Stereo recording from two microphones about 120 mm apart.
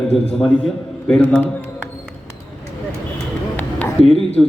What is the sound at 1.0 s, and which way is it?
Speech, 10° left (ahead or behind).